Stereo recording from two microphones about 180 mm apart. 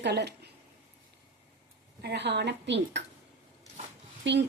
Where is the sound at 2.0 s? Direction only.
70° right (ahead or behind).